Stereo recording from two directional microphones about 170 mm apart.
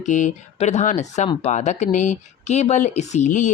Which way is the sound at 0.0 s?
45° left (ahead or behind).